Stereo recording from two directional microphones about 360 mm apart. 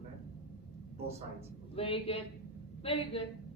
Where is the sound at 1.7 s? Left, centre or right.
Centre.